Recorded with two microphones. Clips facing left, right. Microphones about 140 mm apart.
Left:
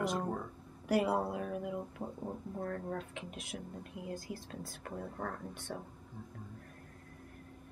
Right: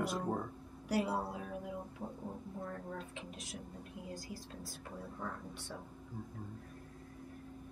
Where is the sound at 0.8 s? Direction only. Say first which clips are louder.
Left 4 dB; 60° left (ahead or behind).